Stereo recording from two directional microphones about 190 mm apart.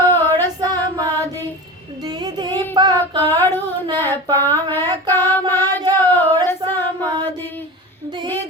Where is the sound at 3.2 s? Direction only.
10° left (ahead or behind).